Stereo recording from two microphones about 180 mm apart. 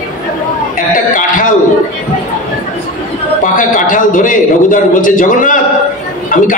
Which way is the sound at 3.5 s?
50° left (ahead or behind).